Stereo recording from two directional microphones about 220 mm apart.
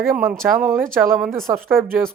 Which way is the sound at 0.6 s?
40° right (ahead or behind).